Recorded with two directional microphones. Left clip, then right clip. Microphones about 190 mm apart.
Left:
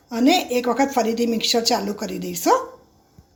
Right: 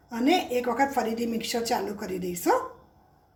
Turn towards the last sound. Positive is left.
turn(degrees=30)  # may be behind; listen again after turning